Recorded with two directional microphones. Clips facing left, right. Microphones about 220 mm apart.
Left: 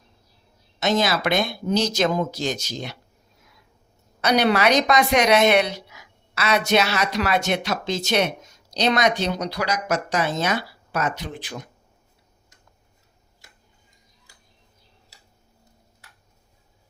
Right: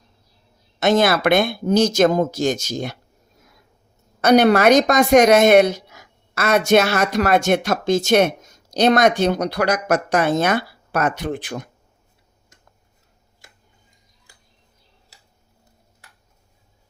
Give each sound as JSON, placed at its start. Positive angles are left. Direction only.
{"t": 0.8, "sound": "speech", "side_deg": -55}
{"t": 4.2, "sound": "speech", "side_deg": -50}